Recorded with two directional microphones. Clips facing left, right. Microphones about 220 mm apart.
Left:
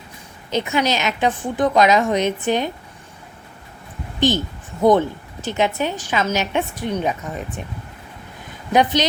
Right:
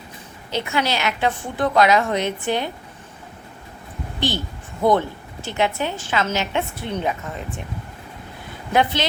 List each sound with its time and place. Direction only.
0.5 s a woman's voice: 20° left (ahead or behind)
4.3 s a woman's voice: 20° left (ahead or behind)
8.7 s a woman's voice: 15° left (ahead or behind)